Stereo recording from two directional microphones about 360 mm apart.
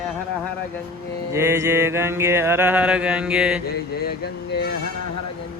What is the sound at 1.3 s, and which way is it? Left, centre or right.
Mantra, centre.